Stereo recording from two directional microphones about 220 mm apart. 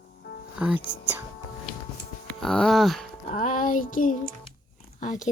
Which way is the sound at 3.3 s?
35° left (ahead or behind).